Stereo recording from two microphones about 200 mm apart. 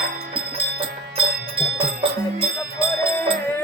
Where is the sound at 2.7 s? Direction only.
25° right (ahead or behind).